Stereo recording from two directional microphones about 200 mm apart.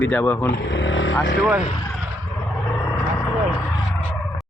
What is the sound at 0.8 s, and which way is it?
Vehicle, 65° left (ahead or behind).